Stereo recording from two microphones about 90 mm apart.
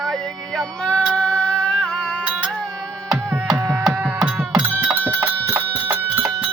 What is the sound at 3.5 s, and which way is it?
Music, 25° right (ahead or behind).